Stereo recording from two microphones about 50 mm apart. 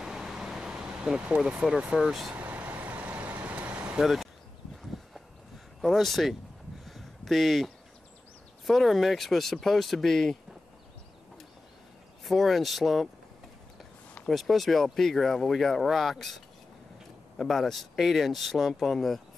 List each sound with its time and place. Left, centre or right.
0.0 s vehicle: centre
2.0 s speech: centre
2.3 s vehicle: right
4.0 s speech: centre
5.8 s speech: centre
6.9 s a sound: centre
8.6 s speech: centre
12.3 s speech: centre
14.3 s speech: centre
17.4 s speech: centre